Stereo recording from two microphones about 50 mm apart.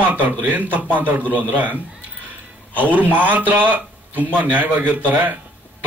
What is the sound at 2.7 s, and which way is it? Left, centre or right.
Speech, right.